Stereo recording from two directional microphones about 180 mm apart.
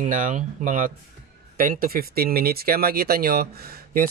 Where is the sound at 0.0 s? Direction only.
45° right (ahead or behind).